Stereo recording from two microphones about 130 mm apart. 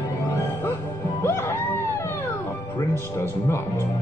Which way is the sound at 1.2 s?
20° left (ahead or behind).